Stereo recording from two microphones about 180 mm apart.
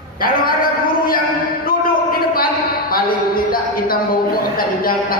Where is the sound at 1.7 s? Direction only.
55° left (ahead or behind).